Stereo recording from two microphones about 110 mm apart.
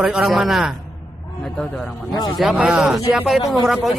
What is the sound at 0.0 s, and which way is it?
Speech, centre (ahead or behind).